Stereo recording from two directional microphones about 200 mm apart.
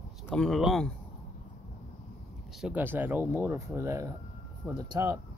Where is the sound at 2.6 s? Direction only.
10° right (ahead or behind).